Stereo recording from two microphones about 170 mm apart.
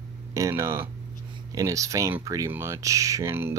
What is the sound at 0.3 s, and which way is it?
Speech, 15° right (ahead or behind).